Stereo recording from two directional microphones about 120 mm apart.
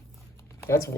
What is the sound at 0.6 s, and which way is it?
Speech, 25° left (ahead or behind).